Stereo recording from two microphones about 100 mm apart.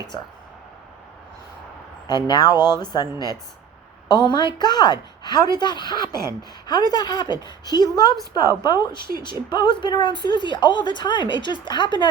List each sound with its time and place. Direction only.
2.0 s a woman's voice: 50° left (ahead or behind)
4.1 s a woman's voice: 50° left (ahead or behind)